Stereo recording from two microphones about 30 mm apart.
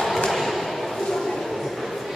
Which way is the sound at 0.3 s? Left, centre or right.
Centre.